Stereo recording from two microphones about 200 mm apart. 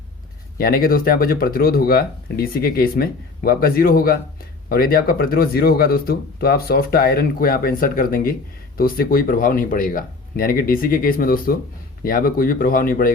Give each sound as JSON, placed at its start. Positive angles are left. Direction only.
{"t": 0.6, "sound": "speech", "side_deg": 45}